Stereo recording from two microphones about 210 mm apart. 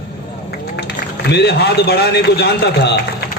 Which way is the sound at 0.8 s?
50° left (ahead or behind).